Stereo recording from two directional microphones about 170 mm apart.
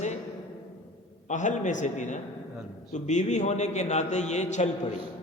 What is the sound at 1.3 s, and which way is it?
A man's voice, 45° left (ahead or behind).